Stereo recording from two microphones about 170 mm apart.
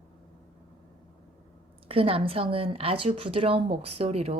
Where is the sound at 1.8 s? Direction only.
35° right (ahead or behind).